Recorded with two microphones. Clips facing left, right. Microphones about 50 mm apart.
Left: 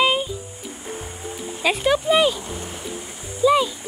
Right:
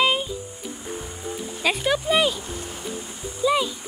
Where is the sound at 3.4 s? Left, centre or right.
Centre.